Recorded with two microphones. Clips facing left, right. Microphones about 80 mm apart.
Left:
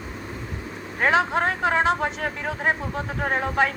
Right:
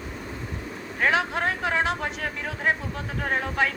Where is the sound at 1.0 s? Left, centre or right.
Left.